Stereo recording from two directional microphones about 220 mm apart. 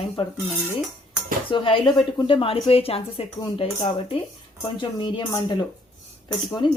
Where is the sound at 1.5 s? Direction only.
25° left (ahead or behind).